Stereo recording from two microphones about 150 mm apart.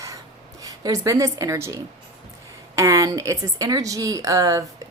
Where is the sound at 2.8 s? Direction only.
20° right (ahead or behind).